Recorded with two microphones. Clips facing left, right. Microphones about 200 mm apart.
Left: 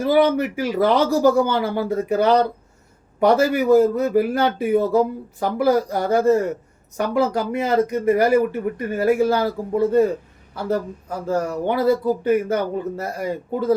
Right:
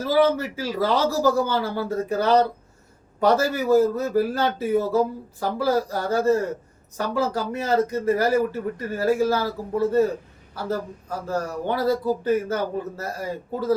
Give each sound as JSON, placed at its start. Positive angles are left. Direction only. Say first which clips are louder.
{"t": 0.0, "sound": "a man's voice", "louder": "left 3 dB", "side_deg": 15}
{"t": 11.3, "sound": "a man's voice", "louder": "left 5 dB", "side_deg": 15}